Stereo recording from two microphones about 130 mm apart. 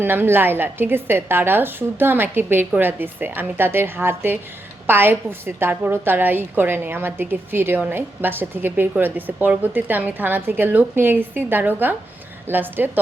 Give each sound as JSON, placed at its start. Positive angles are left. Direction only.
{"t": 0.0, "sound": "a woman's voice", "side_deg": -15}